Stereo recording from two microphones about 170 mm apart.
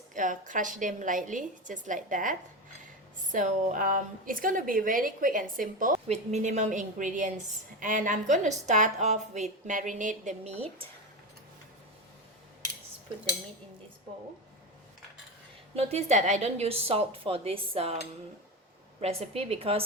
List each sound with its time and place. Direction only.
0.1 s a woman's voice: 50° right (ahead or behind)
3.3 s a woman's voice: 50° right (ahead or behind)
15.7 s a woman's voice: 40° right (ahead or behind)
18.9 s a woman's voice: 40° right (ahead or behind)